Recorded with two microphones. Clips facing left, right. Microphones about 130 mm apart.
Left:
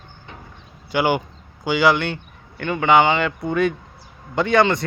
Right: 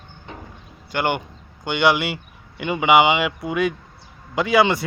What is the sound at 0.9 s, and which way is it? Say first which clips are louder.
A man's voice: left 3 dB; 5° left (ahead or behind).